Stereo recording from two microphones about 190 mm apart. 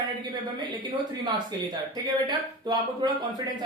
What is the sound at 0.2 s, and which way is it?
Speech, 25° right (ahead or behind).